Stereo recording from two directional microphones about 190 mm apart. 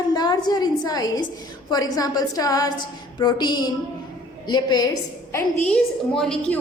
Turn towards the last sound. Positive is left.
turn(degrees=5)  # may be behind; listen again after turning